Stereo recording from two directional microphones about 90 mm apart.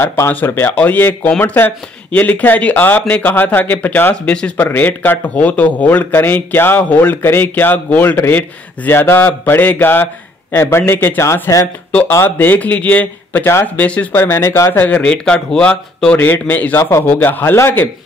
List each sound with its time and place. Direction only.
0.0 s a man's voice: 30° left (ahead or behind)